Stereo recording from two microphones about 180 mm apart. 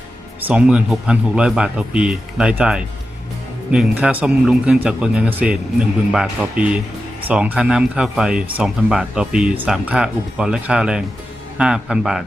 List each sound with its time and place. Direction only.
0.4 s speech: 5° right (ahead or behind)